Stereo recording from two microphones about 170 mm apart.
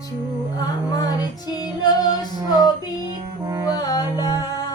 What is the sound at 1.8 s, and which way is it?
Music, 25° left (ahead or behind).